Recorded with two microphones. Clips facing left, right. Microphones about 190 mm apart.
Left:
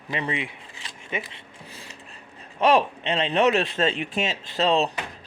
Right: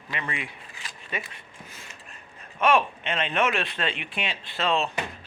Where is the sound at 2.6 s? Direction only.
35° left (ahead or behind).